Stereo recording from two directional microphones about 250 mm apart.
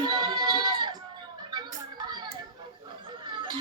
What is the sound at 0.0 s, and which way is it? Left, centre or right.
Sheep, centre.